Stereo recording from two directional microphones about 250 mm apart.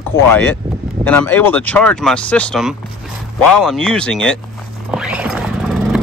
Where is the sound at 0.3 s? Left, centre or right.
Centre.